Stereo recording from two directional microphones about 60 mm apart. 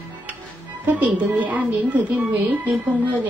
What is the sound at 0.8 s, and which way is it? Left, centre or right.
A woman's voice, right.